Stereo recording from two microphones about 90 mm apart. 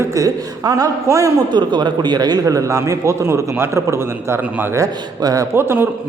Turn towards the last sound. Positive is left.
turn(degrees=-25)  # may be behind; listen again after turning